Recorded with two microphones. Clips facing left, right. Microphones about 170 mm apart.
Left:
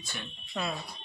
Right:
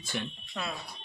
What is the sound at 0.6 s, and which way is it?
Speech, 5° left (ahead or behind).